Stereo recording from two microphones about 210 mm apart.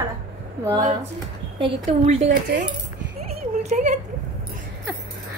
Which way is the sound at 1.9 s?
35° right (ahead or behind).